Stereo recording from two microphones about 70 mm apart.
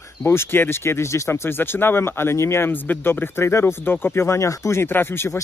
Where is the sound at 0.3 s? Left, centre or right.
Left.